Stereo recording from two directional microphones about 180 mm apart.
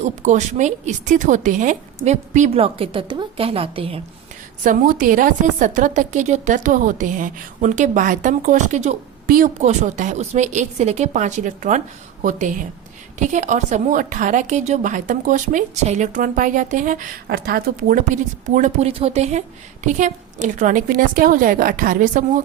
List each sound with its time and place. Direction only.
0.0 s a woman's voice: 40° right (ahead or behind)
4.6 s a woman's voice: 50° right (ahead or behind)
9.2 s a woman's voice: 50° right (ahead or behind)